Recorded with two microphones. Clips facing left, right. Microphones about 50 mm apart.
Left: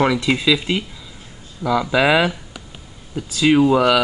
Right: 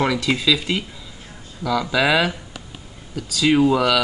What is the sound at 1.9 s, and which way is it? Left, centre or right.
Speech, centre.